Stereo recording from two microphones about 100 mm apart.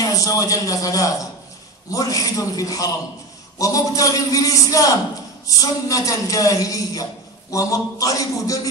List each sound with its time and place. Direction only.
0.0 s speech: 35° left (ahead or behind)